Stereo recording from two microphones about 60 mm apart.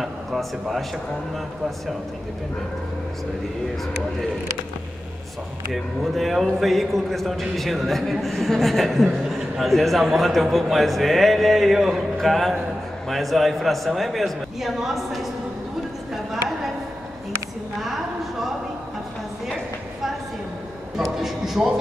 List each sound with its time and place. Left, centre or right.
0.0 s speech: centre
5.7 s a man's voice: centre
21.0 s a sound: centre